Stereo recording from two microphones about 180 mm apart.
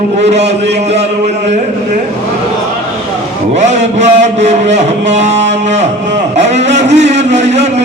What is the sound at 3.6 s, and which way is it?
Speech, 40° right (ahead or behind).